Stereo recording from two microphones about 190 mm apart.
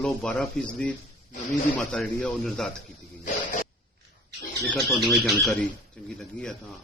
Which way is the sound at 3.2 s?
45° left (ahead or behind).